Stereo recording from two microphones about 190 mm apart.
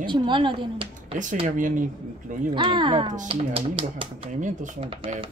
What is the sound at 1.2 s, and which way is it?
Speech, 40° right (ahead or behind).